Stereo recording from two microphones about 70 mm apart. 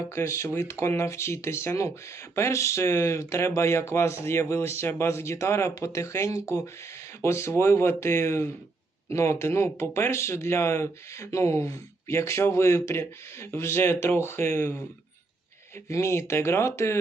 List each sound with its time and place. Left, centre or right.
0.1 s speech: left
15.9 s speech: left